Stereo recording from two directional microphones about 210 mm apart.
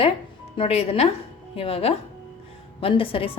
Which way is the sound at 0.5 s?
30° left (ahead or behind).